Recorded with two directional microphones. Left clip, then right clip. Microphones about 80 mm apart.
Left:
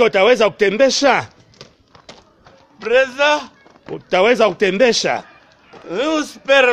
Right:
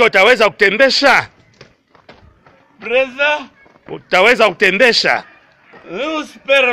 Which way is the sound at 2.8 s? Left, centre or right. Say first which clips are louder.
Even; left.